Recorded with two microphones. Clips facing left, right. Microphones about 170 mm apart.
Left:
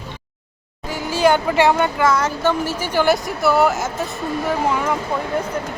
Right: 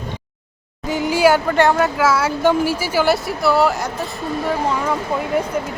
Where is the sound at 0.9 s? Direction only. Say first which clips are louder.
Right 5 dB; 20° right (ahead or behind).